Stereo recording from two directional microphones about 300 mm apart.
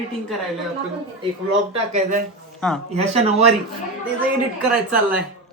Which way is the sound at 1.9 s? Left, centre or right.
Right.